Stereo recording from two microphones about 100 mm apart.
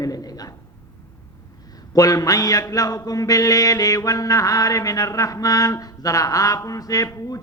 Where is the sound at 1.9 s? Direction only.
35° left (ahead or behind).